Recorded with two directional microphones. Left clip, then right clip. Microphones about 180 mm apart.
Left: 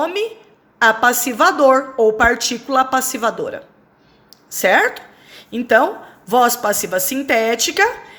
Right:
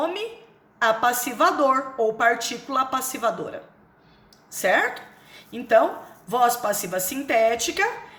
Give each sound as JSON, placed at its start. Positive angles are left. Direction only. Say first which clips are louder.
{"t": 0.0, "sound": "a woman's voice", "louder": "left 7 dB", "side_deg": 45}